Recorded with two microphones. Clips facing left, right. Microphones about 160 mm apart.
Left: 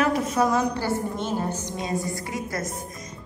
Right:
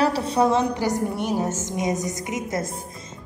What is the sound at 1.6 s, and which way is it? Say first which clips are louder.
A woman's voice: right 3 dB; 20° right (ahead or behind).